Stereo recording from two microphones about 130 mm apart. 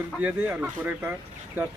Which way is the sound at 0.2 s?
15° right (ahead or behind).